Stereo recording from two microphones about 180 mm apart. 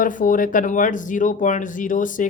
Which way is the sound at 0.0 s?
45° left (ahead or behind).